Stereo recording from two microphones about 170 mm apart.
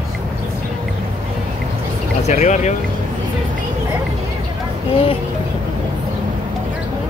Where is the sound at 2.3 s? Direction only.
40° left (ahead or behind).